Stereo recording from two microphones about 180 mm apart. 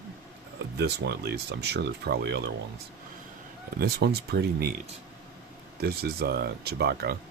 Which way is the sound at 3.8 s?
65° right (ahead or behind).